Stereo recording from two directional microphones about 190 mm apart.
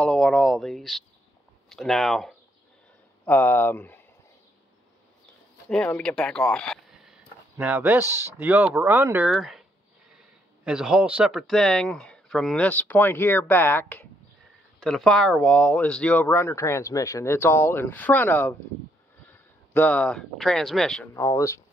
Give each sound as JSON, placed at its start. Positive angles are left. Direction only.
{"t": 0.0, "sound": "speech", "side_deg": 5}
{"t": 5.7, "sound": "speech", "side_deg": 5}
{"t": 7.5, "sound": "speech", "side_deg": -10}
{"t": 9.3, "sound": "speech", "side_deg": 0}
{"t": 19.7, "sound": "speech", "side_deg": 5}
{"t": 21.1, "sound": "speech", "side_deg": 15}